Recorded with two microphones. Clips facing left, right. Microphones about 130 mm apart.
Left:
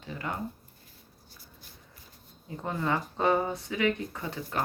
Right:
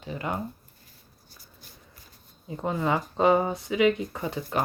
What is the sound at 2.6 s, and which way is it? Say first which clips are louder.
Speech: right 4 dB; 20° right (ahead or behind).